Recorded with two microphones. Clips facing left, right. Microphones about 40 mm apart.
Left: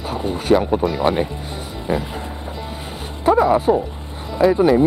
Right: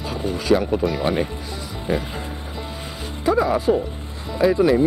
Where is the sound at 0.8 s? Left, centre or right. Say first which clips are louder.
Left 2 dB; centre.